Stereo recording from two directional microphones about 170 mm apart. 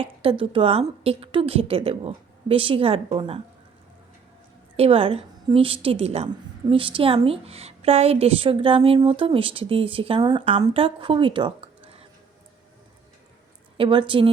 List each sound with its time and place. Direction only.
0.0 s a woman's voice: 35° right (ahead or behind)
4.8 s a woman's voice: 35° right (ahead or behind)
13.7 s a woman's voice: 30° right (ahead or behind)